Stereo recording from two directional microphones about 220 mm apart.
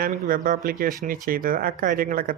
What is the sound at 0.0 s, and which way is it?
Speech, 40° right (ahead or behind).